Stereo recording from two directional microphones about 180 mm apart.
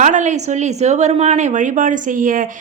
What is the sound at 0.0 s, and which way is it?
A woman's voice, 45° right (ahead or behind).